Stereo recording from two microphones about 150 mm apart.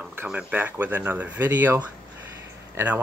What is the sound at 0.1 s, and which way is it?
Speech, 10° right (ahead or behind).